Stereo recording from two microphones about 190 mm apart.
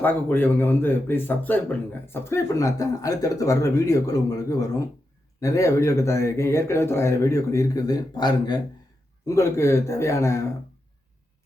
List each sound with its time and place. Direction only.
0.0 s a man's voice: 10° left (ahead or behind)